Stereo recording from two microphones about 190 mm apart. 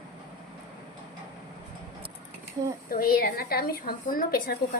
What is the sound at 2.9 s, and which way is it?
A woman's voice, 50° left (ahead or behind).